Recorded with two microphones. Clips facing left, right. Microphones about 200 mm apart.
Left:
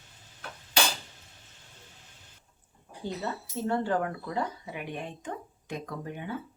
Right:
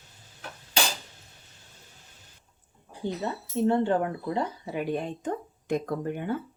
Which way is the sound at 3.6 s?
20° right (ahead or behind).